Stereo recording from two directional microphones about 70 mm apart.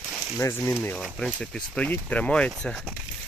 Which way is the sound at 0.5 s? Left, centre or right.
Left.